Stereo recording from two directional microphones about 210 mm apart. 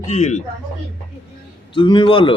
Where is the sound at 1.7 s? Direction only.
25° left (ahead or behind).